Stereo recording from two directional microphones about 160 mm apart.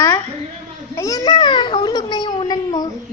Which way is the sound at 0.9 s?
20° left (ahead or behind).